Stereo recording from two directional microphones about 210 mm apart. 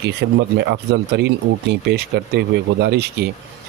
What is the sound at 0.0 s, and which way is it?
Speech, 55° right (ahead or behind).